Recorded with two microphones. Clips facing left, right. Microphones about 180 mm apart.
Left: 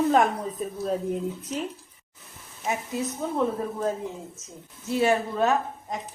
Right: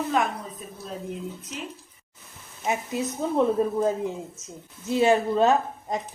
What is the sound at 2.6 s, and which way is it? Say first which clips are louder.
Speech: right 1 dB; 20° right (ahead or behind).